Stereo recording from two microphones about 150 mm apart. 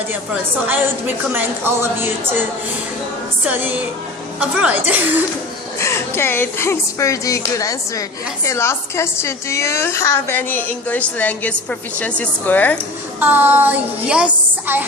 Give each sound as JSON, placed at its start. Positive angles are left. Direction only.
{"t": 0.7, "sound": "a woman's voice", "side_deg": -10}
{"t": 3.4, "sound": "a woman's voice", "side_deg": -10}
{"t": 5.8, "sound": "a woman's voice", "side_deg": 15}
{"t": 13.1, "sound": "a woman's voice", "side_deg": -10}